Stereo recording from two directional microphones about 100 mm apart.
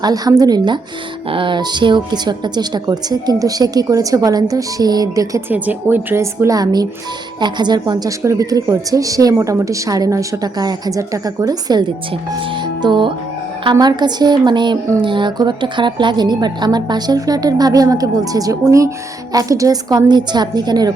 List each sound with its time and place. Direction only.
0.0 s speech: 40° right (ahead or behind)
1.3 s a woman's voice: 55° right (ahead or behind); by 5.4 s 35° right (ahead or behind)
5.5 s a woman's voice: 15° right (ahead or behind)
6.6 s a woman's voice: 40° right (ahead or behind)
8.2 s speech: 30° right (ahead or behind)
12.8 s a woman's voice: 50° right (ahead or behind)